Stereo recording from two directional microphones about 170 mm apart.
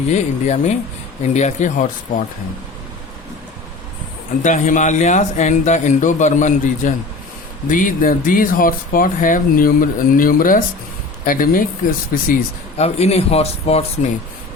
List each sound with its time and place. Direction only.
0.1 s speech: 45° left (ahead or behind)
4.4 s speech: 50° left (ahead or behind)
12.7 s speech: 40° left (ahead or behind)